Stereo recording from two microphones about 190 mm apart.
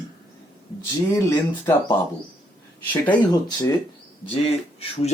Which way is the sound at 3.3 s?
20° left (ahead or behind).